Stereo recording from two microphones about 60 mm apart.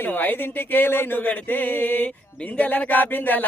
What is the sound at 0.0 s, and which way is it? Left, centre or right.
Speech, left.